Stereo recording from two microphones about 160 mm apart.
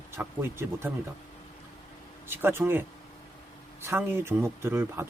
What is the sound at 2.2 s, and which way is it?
Speech, 15° right (ahead or behind).